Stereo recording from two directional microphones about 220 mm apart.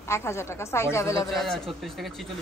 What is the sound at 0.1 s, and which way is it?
A woman's voice, 10° left (ahead or behind).